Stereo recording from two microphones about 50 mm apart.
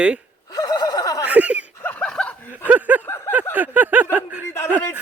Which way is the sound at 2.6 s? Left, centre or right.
Right.